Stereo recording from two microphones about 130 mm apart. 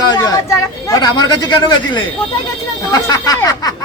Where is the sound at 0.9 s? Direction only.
30° left (ahead or behind).